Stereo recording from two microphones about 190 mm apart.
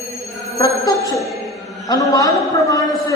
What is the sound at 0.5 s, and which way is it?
Music, 15° left (ahead or behind).